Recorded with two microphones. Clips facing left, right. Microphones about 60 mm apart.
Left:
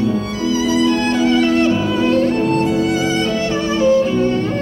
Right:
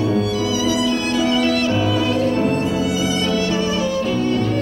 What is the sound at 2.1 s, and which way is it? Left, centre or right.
Music, left.